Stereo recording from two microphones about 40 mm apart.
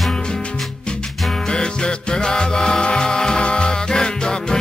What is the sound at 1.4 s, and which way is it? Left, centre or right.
Music, centre.